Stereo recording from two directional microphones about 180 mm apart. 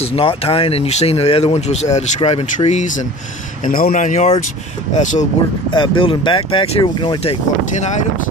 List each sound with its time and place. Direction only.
0.0 s speech: 30° left (ahead or behind)
5.7 s speech: 25° left (ahead or behind)
7.8 s speech: 40° left (ahead or behind)